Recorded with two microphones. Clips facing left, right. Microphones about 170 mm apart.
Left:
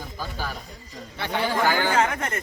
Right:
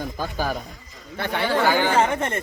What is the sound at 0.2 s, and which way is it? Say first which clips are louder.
Speech: right 5 dB; 55° right (ahead or behind).